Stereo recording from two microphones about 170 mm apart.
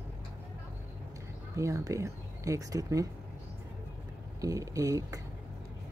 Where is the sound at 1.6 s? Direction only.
20° right (ahead or behind).